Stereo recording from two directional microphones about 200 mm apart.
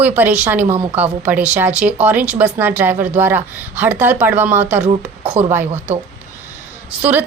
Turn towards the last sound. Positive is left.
turn(degrees=-10)  # may be behind; listen again after turning